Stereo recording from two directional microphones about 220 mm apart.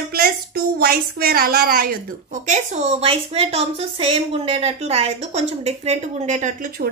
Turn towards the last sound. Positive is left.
turn(degrees=-35)  # may be behind; listen again after turning